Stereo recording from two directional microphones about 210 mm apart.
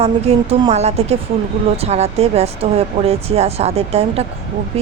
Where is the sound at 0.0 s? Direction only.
30° right (ahead or behind).